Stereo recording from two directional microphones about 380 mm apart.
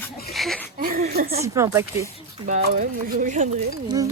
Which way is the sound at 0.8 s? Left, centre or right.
Right.